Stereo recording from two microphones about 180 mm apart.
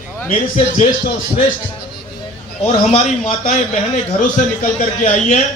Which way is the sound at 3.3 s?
45° left (ahead or behind).